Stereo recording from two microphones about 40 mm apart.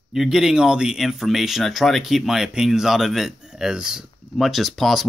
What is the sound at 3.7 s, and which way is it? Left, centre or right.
Speech, centre.